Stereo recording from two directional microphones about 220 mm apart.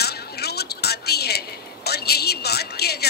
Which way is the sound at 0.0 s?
45° left (ahead or behind).